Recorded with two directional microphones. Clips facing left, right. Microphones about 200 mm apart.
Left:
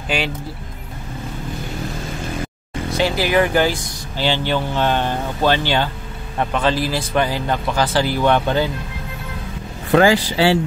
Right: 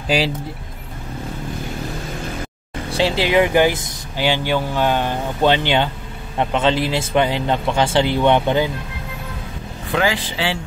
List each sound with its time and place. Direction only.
0.1 s speech: 35° right (ahead or behind)
2.9 s speech: 30° right (ahead or behind)
9.9 s speech: 45° left (ahead or behind)